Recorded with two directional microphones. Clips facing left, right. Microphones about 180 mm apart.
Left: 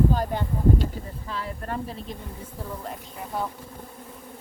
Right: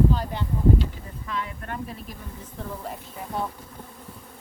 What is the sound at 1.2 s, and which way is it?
Speech, 35° left (ahead or behind).